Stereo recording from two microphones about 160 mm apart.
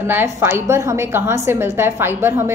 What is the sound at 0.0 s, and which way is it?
A woman's voice, 15° right (ahead or behind).